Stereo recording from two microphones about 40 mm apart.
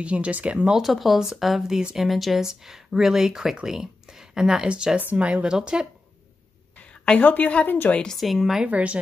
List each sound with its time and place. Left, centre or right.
0.0 s speech: right
0.7 s speech: centre
4.6 s speech: right
6.8 s a sound: left
7.2 s a woman's voice: left
7.6 s speech: left
8.1 s speech: centre
8.6 s speech: right